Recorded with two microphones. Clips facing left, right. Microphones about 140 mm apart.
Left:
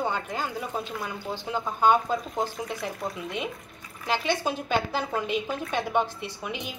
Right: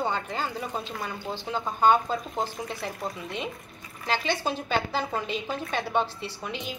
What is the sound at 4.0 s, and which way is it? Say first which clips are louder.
A woman's voice: left 1 dB; 10° left (ahead or behind).